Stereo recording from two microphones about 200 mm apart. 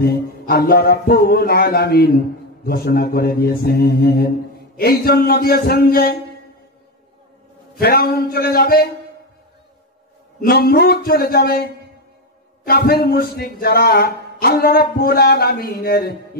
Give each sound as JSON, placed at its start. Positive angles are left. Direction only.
{"t": 0.0, "sound": "a man's voice", "side_deg": 50}
{"t": 7.7, "sound": "a man's voice", "side_deg": 50}
{"t": 10.4, "sound": "a man's voice", "side_deg": 50}
{"t": 12.6, "sound": "a man's voice", "side_deg": 50}